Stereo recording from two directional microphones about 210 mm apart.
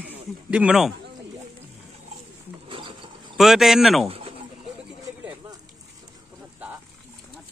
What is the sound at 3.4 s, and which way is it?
Speech, centre (ahead or behind).